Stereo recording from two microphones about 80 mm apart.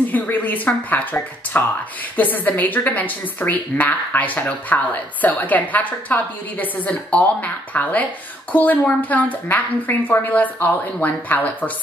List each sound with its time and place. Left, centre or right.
0.1 s a woman's voice: left